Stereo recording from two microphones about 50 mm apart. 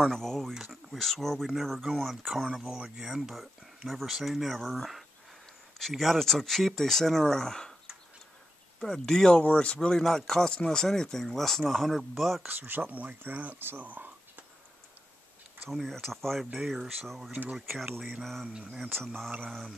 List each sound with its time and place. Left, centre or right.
0.1 s speech: centre
0.6 s a sound: centre
0.9 s speech: centre
8.7 s speech: centre
9.3 s speech: left; by 12.4 s centre
12.4 s speech: right
13.7 s a sound: right
15.7 s speech: centre
18.4 s speech: right
19.4 s speech: centre